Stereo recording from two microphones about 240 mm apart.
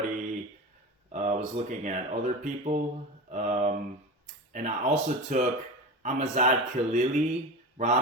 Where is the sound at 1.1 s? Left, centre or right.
Right.